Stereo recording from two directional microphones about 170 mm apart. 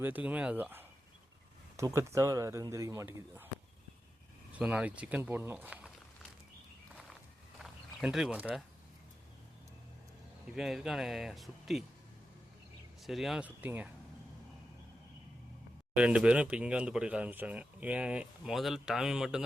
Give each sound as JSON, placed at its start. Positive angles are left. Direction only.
{"t": 0.0, "sound": "speech", "side_deg": -10}
{"t": 4.5, "sound": "speech", "side_deg": -5}
{"t": 7.6, "sound": "a sound", "side_deg": -5}
{"t": 10.5, "sound": "speech", "side_deg": 0}
{"t": 13.0, "sound": "speech", "side_deg": 0}
{"t": 16.0, "sound": "speech", "side_deg": -5}